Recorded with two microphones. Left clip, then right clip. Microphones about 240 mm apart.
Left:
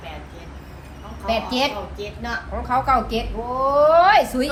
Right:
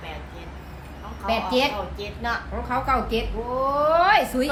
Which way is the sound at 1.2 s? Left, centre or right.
Centre.